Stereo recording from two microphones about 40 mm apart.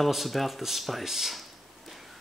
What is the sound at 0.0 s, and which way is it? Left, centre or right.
Speech, centre.